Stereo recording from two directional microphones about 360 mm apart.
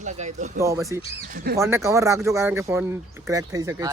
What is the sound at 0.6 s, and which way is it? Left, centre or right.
Speech, centre.